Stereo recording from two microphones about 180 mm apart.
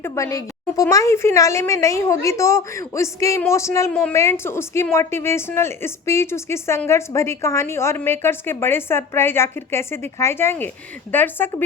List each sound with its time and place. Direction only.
0.0 s a woman's voice: 15° left (ahead or behind)